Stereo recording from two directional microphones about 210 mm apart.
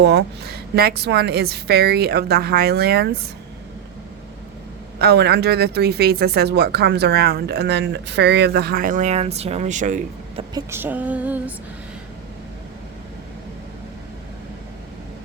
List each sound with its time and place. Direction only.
0.0 s speech: 50° right (ahead or behind)
4.9 s speech: 50° right (ahead or behind); by 10.4 s 35° right (ahead or behind)
10.5 s speech: 10° right (ahead or behind)